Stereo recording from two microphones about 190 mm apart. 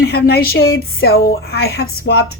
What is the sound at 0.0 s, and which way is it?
Speech, 55° left (ahead or behind).